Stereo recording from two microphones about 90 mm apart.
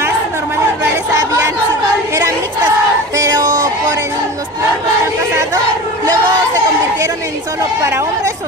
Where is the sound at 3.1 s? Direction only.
40° right (ahead or behind).